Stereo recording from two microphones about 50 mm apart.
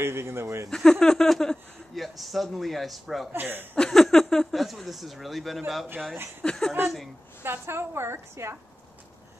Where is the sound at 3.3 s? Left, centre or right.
Right.